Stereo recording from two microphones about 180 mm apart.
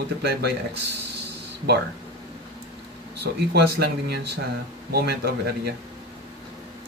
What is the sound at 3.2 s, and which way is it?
Speech, 65° right (ahead or behind).